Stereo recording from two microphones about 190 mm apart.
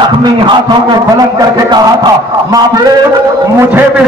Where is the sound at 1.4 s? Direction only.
20° right (ahead or behind).